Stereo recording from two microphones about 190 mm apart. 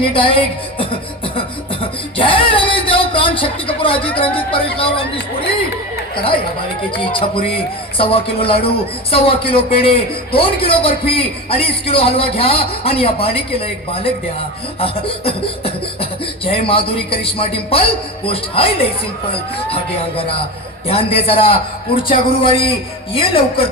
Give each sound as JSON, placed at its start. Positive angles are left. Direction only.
{"t": 0.0, "sound": "a man's voice", "side_deg": 25}
{"t": 1.4, "sound": "beatboxing", "side_deg": 30}
{"t": 6.9, "sound": "a man's voice", "side_deg": 25}